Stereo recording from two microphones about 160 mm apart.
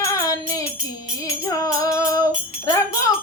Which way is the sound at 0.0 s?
20° left (ahead or behind).